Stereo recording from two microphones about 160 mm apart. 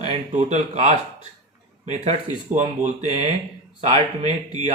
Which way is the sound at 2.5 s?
45° right (ahead or behind).